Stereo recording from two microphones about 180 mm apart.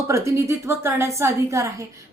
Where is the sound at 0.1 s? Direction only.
15° right (ahead or behind).